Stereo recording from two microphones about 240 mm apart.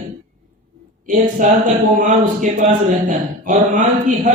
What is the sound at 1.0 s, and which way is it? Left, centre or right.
A man's voice, right.